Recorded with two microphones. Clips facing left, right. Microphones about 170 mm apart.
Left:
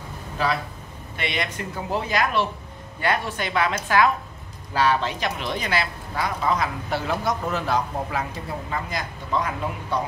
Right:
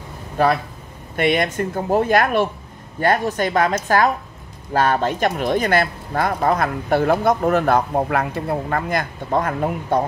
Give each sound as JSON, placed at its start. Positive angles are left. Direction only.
{"t": 0.4, "sound": "speech", "side_deg": -55}